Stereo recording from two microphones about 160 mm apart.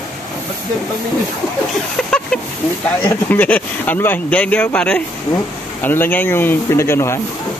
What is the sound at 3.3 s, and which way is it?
Speech, 10° left (ahead or behind).